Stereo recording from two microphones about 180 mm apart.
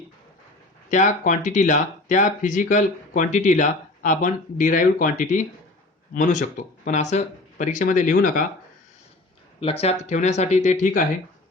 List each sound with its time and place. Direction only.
0.9 s speech: 45° left (ahead or behind)
9.6 s speech: 30° left (ahead or behind)